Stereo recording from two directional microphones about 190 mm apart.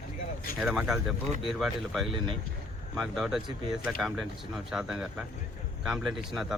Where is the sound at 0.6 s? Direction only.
5° right (ahead or behind).